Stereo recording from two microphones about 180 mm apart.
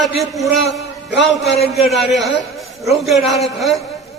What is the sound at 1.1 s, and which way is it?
Speech, 70° left (ahead or behind).